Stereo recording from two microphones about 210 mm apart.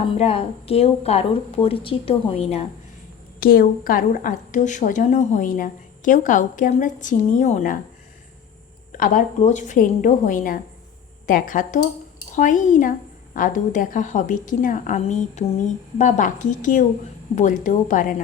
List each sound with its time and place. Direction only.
0.0 s speech: 25° left (ahead or behind)
3.4 s a woman's voice: 45° left (ahead or behind)
8.9 s a woman's voice: 40° left (ahead or behind)